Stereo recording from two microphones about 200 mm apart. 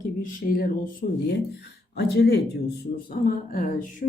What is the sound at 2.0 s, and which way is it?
A woman's voice, 55° left (ahead or behind).